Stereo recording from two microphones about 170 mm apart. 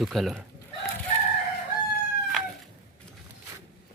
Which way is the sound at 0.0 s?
Centre (ahead or behind).